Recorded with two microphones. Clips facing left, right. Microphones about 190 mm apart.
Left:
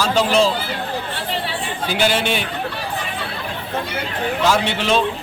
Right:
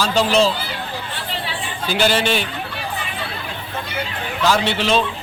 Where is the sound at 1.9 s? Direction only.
55° left (ahead or behind).